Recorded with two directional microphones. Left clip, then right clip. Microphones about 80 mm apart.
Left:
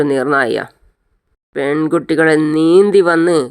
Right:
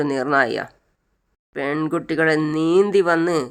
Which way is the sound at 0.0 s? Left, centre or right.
Left.